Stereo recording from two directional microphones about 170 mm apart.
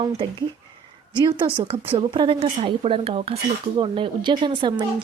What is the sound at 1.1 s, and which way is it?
A woman's voice, 25° right (ahead or behind).